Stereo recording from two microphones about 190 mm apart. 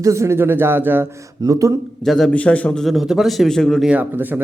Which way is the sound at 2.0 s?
Centre (ahead or behind).